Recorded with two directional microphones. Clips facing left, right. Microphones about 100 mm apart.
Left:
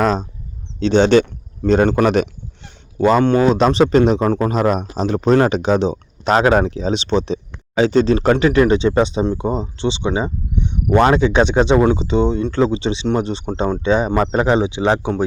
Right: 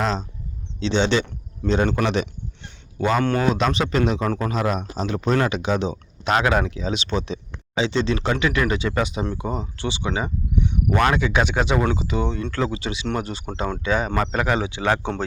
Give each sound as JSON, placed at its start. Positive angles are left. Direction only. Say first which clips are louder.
{"t": 0.0, "sound": "speech", "louder": "left 7 dB", "side_deg": 50}
{"t": 3.0, "sound": "speech", "louder": "left 7 dB", "side_deg": 35}
{"t": 7.8, "sound": "speech", "louder": "left 8 dB", "side_deg": 45}